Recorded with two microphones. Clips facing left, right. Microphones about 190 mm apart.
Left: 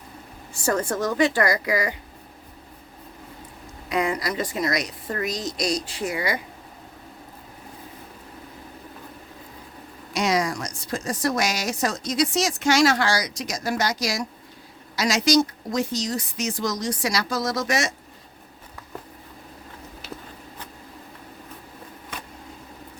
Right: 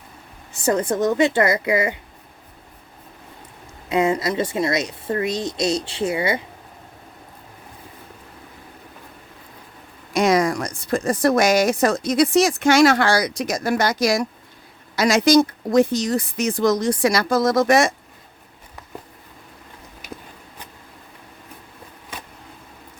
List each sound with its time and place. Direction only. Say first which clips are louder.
0.5 s speech: right 4 dB; 20° right (ahead or behind)
3.8 s speech: right 5 dB; 25° right (ahead or behind)
10.1 s a woman's voice: right 6 dB; 50° right (ahead or behind)
20.0 s a sound: right 2 dB; 15° right (ahead or behind)